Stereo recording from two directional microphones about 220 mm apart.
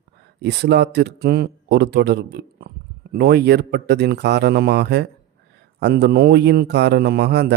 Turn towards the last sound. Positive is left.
turn(degrees=-50)  # may be behind; listen again after turning